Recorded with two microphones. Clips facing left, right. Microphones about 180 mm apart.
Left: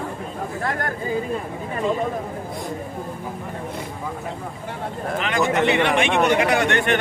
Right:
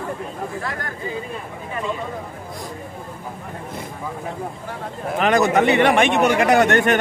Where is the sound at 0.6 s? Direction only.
50° left (ahead or behind).